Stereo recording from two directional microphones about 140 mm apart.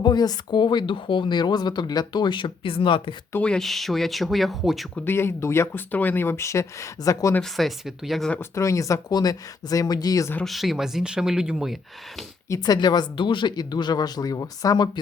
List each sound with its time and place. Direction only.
0.0 s speech: 30° left (ahead or behind)
3.3 s speech: 5° left (ahead or behind)
5.0 s speech: 15° left (ahead or behind)
7.4 s speech: centre (ahead or behind)
8.4 s speech: 20° left (ahead or behind)
10.4 s speech: centre (ahead or behind)
12.5 s speech: 25° left (ahead or behind)